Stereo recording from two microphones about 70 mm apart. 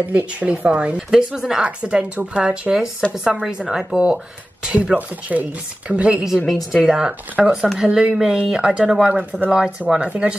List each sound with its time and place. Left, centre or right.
0.1 s speech: right
6.2 s a woman's voice: centre
6.9 s speech: centre